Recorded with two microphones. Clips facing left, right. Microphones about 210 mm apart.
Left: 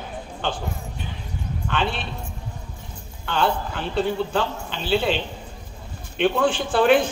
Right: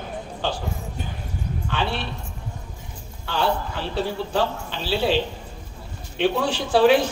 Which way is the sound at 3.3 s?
55° left (ahead or behind).